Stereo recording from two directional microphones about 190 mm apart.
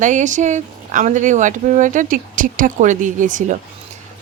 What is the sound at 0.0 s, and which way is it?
A woman's voice, 40° right (ahead or behind).